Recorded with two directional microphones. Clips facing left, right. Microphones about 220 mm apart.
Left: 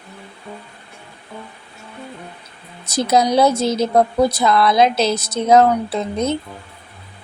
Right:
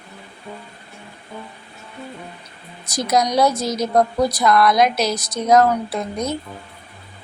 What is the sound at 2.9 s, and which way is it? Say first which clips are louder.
A woman's voice: left 3 dB; 25° left (ahead or behind).